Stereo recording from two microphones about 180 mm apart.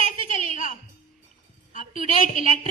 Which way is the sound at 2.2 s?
45° left (ahead or behind).